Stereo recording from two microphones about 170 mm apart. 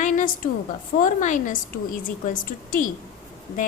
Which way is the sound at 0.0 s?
45° left (ahead or behind).